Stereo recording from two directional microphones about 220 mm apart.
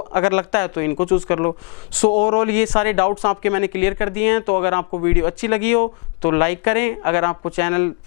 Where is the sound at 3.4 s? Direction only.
15° left (ahead or behind).